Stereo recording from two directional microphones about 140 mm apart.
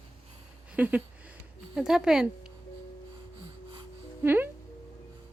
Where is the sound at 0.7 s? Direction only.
10° right (ahead or behind).